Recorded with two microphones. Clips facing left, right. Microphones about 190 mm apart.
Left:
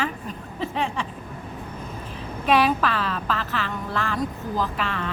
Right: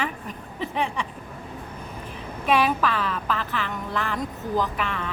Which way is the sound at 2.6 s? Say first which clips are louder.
Left 1 dB; 15° right (ahead or behind).